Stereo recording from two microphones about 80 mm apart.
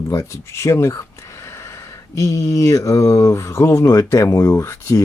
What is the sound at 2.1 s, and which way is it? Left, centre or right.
Speech, left.